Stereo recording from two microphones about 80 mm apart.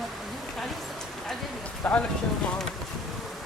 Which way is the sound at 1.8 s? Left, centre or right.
Left.